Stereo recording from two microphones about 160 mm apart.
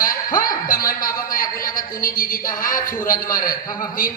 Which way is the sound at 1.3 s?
60° left (ahead or behind).